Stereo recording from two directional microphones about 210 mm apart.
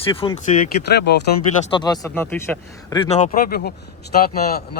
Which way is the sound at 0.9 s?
50° left (ahead or behind).